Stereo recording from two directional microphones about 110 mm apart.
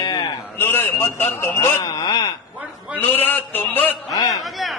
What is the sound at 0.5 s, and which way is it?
A man's voice, 20° left (ahead or behind).